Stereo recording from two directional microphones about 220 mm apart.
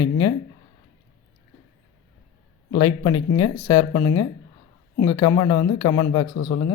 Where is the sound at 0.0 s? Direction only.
15° left (ahead or behind).